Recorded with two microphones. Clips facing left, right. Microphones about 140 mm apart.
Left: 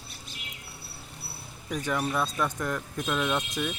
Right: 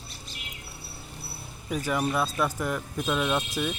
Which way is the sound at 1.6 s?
5° right (ahead or behind).